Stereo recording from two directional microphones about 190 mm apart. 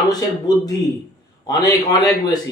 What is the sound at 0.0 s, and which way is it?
A man's voice, 20° left (ahead or behind).